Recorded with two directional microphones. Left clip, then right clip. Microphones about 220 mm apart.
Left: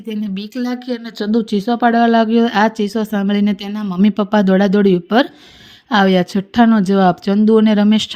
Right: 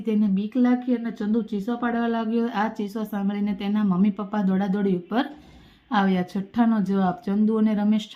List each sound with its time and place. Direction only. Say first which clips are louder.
0.3 s speech: even; 40° left (ahead or behind)